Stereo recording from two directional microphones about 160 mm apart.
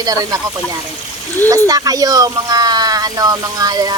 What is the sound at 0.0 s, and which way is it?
Speech, 20° right (ahead or behind).